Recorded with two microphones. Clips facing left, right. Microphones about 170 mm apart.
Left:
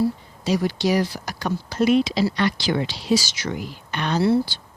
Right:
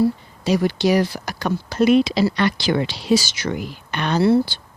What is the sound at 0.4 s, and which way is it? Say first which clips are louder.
Speech: right 3 dB; 65° right (ahead or behind).